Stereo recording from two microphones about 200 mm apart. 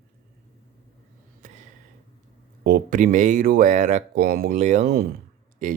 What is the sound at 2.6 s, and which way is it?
Speech, 45° right (ahead or behind).